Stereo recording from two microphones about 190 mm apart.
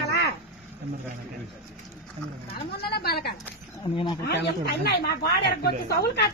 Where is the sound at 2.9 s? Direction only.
55° left (ahead or behind).